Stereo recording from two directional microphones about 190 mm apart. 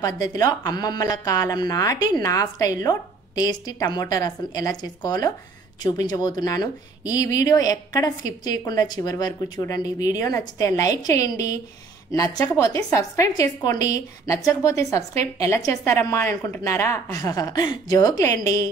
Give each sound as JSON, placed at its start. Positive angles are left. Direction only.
{"t": 0.0, "sound": "a woman's voice", "side_deg": 20}